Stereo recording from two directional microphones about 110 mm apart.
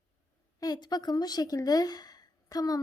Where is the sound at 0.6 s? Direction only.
40° left (ahead or behind).